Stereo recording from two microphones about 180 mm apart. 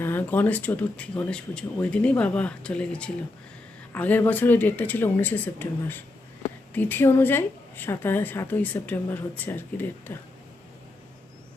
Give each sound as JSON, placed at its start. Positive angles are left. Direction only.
{"t": 0.0, "sound": "a woman's voice", "side_deg": 10}